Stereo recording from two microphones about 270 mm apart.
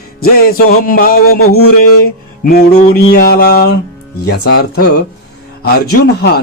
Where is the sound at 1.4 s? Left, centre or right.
Left.